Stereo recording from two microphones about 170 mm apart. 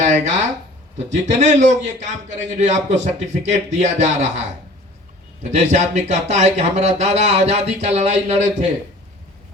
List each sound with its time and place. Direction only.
0.0 s a man's voice: 45° right (ahead or behind)